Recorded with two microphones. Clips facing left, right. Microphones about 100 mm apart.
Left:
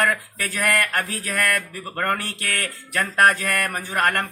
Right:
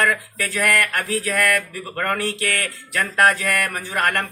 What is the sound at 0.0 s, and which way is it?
Speech, 15° left (ahead or behind).